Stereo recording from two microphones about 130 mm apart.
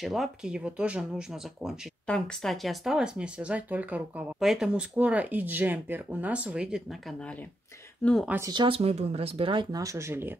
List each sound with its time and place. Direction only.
0.0 s speech: centre (ahead or behind)
8.5 s speech: 40° right (ahead or behind); by 10.3 s 20° right (ahead or behind)